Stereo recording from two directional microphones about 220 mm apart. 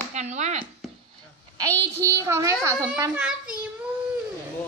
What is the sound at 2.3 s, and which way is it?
A woman's voice, 15° right (ahead or behind).